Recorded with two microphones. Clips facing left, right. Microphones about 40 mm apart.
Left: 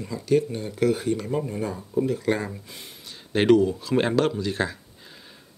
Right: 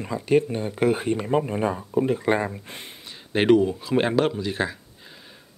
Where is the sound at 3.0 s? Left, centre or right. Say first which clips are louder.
Even; centre.